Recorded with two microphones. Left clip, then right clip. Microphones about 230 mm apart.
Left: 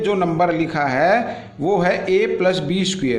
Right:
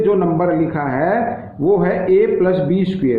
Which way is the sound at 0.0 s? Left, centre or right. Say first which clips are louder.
Right 2 dB; left.